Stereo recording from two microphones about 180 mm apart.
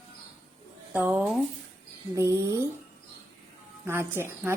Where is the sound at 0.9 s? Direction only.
5° right (ahead or behind).